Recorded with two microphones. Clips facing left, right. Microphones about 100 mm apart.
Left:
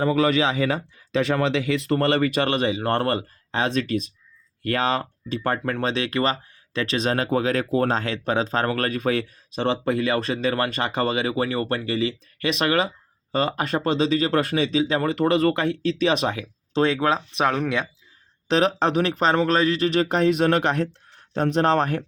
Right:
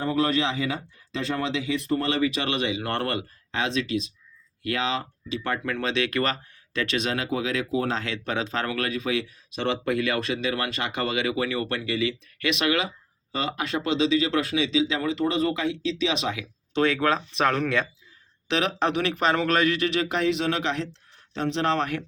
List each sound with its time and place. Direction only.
0.1 s speech: 90° left; by 9.6 s 45° left (ahead or behind)
9.6 s speech: 30° left (ahead or behind)
16.8 s speech: 25° left (ahead or behind)
18.4 s speech: 40° left (ahead or behind)
19.9 s speech: 45° left (ahead or behind)